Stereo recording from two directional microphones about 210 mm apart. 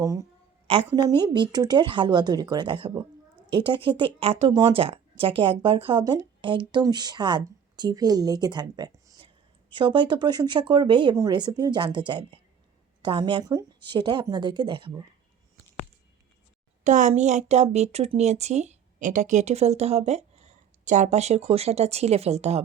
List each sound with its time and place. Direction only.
0.0 s a woman's voice: 15° right (ahead or behind)
16.8 s speech: 35° right (ahead or behind)